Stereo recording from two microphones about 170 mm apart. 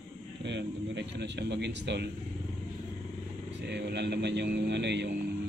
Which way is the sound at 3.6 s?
85° right.